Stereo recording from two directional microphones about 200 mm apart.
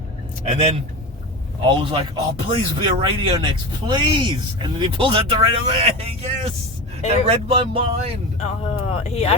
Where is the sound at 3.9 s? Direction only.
25° right (ahead or behind).